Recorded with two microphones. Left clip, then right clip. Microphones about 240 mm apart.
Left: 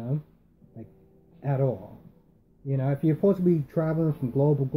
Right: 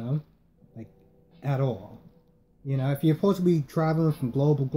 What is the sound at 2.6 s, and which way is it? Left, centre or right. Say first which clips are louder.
Speech: even; right.